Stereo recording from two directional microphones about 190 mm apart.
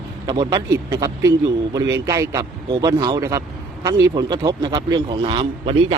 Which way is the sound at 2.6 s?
25° right (ahead or behind).